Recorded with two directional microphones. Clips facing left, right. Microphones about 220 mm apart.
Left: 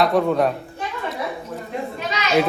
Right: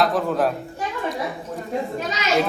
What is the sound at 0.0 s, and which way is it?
Speech, centre (ahead or behind).